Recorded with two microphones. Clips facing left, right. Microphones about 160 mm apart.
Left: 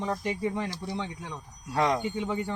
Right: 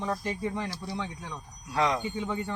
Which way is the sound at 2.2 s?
15° left (ahead or behind).